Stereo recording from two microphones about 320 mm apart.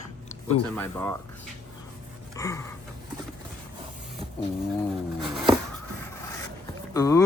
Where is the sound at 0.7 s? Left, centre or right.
Centre.